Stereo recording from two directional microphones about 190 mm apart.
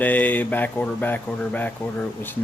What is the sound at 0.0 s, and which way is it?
Speech, 10° left (ahead or behind).